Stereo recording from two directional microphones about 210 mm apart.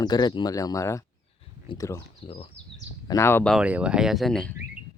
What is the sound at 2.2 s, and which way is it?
Speech, 25° left (ahead or behind).